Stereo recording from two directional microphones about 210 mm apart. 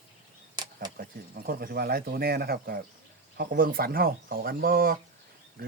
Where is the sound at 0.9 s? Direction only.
45° right (ahead or behind).